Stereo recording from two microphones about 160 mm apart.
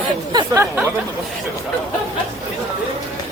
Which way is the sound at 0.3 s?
15° right (ahead or behind).